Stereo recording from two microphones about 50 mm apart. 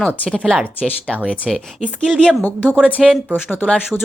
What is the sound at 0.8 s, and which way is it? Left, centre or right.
Speech, left.